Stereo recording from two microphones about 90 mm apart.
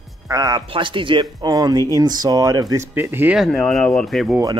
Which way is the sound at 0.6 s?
70° right (ahead or behind).